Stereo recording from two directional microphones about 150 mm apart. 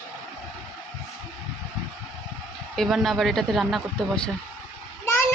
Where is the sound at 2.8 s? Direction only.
Centre (ahead or behind).